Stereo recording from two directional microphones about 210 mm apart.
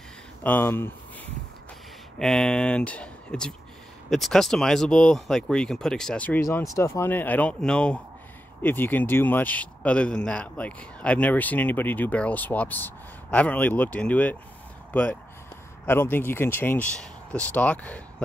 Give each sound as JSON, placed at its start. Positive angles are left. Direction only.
{"t": 0.4, "sound": "speech", "side_deg": 10}
{"t": 2.1, "sound": "speech", "side_deg": 0}